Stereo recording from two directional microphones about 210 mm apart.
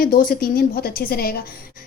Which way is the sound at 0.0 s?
45° left (ahead or behind).